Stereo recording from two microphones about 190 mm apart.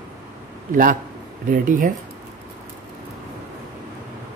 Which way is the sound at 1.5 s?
45° right (ahead or behind).